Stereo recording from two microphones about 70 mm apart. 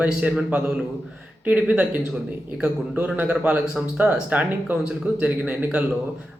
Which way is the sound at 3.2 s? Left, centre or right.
Centre.